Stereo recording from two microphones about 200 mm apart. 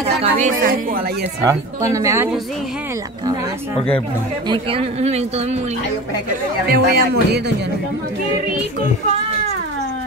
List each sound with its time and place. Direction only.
0.2 s speech: 40° right (ahead or behind)
1.4 s speech: 15° right (ahead or behind)
4.5 s speech: 25° right (ahead or behind)
6.7 s speech: 50° right (ahead or behind)